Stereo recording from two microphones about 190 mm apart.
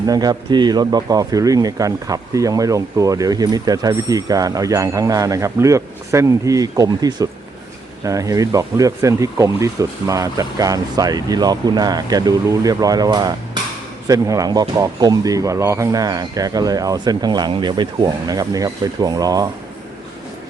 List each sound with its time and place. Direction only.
0.0 s speech: 20° right (ahead or behind)